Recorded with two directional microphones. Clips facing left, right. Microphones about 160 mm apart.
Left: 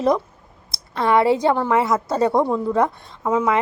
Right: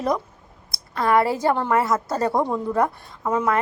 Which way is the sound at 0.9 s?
Centre (ahead or behind).